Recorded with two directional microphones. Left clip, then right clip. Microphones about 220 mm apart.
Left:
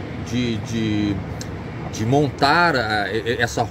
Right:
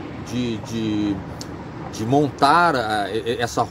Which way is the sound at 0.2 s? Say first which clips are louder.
Left 2 dB; 10° right (ahead or behind).